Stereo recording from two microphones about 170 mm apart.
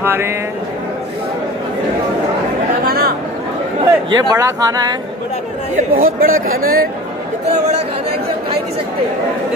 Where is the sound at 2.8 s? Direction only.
65° right (ahead or behind).